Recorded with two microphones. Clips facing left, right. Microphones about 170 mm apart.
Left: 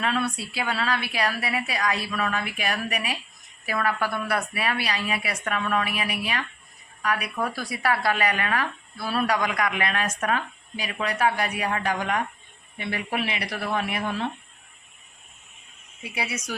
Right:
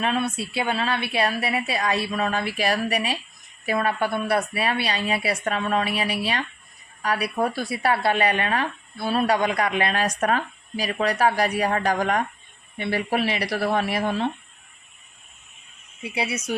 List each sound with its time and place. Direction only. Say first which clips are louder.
0.0 s a woman's voice: right 2 dB; 25° right (ahead or behind)
16.0 s a woman's voice: right 4 dB; 25° right (ahead or behind)